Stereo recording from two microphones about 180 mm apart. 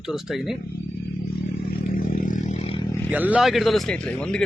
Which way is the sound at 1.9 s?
50° left (ahead or behind).